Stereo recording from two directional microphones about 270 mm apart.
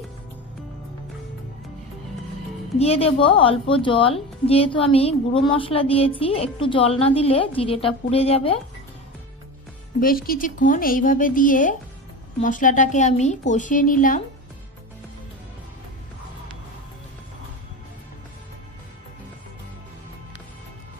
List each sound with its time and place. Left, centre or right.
2.8 s a woman's voice: left
9.9 s a woman's voice: left